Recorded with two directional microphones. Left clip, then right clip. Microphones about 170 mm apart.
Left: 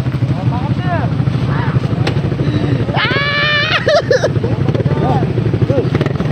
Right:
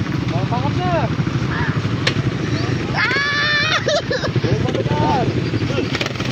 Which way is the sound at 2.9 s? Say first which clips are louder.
Left 3 dB; 30° left (ahead or behind).